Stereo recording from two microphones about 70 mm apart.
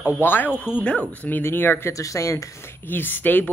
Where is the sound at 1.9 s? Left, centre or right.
Left.